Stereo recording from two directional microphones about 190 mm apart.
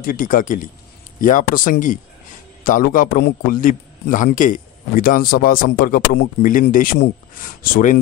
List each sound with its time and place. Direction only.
0.0 s a man's voice: 45° left (ahead or behind)